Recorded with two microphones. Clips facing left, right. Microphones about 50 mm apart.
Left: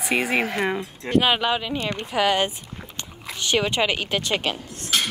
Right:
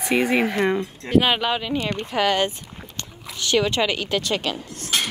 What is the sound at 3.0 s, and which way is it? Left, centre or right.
A woman's voice, left.